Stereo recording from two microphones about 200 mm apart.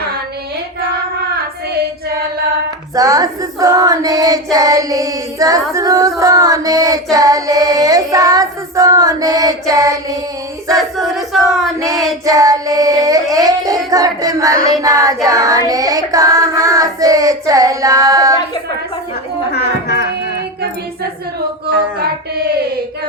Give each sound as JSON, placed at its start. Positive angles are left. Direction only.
{"t": 2.9, "sound": "female singing", "side_deg": -15}
{"t": 10.8, "sound": "battle cry", "side_deg": 0}
{"t": 11.8, "sound": "female singing", "side_deg": -15}
{"t": 12.2, "sound": "child singing", "side_deg": -15}
{"t": 21.9, "sound": "a sound", "side_deg": -50}